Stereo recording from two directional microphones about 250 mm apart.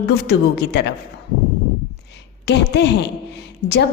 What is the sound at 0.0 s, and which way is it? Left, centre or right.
Speech, left.